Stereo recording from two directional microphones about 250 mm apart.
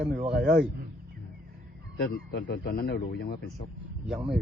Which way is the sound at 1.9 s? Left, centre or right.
Left.